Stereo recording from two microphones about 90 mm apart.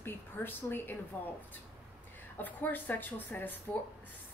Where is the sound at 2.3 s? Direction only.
20° left (ahead or behind).